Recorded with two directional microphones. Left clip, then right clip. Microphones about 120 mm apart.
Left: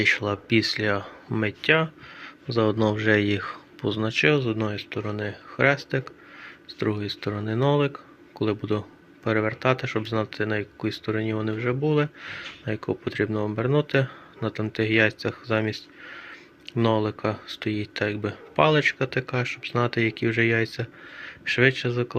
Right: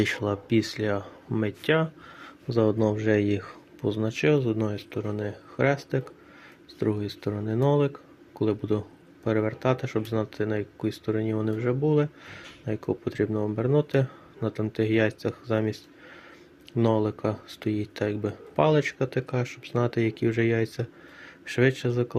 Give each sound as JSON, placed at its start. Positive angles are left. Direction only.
{"t": 0.0, "sound": "speech", "side_deg": -55}
{"t": 0.3, "sound": "speech", "side_deg": -30}